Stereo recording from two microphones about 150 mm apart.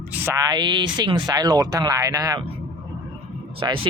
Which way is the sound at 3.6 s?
35° right (ahead or behind).